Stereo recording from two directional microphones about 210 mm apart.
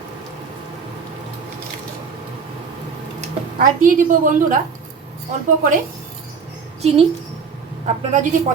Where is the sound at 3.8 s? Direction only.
40° right (ahead or behind).